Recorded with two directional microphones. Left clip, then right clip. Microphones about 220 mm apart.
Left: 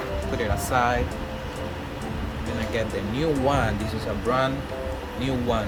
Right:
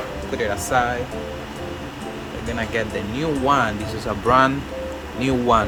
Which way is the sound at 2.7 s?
5° right (ahead or behind).